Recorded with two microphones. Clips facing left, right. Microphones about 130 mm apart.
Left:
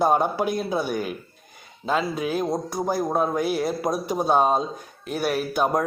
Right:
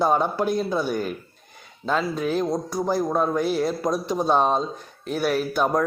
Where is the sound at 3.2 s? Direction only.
10° left (ahead or behind).